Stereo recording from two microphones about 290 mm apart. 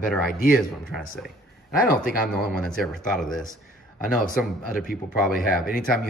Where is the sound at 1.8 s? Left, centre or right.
Left.